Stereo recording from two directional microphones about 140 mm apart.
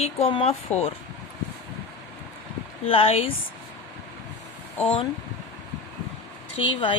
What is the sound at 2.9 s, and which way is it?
Speech, 40° left (ahead or behind).